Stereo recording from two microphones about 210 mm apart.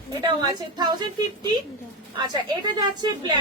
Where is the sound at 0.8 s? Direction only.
20° right (ahead or behind).